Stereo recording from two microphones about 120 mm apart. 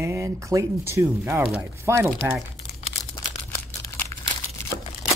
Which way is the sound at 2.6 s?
55° left (ahead or behind).